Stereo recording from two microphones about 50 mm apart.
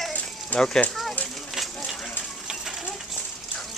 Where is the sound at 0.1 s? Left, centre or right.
Left.